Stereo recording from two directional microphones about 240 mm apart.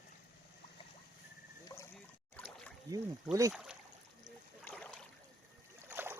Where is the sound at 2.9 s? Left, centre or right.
Centre.